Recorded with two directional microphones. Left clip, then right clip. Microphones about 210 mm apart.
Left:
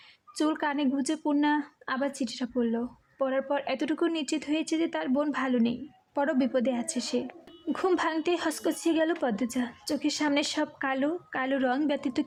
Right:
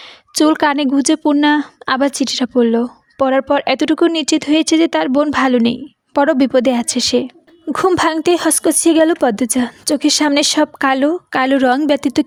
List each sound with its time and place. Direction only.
0.3 s a woman's voice: 40° right (ahead or behind)